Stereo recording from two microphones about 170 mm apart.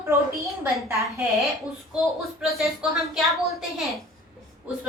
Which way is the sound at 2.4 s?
Centre (ahead or behind).